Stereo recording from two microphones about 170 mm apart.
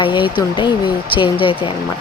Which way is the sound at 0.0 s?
30° left (ahead or behind).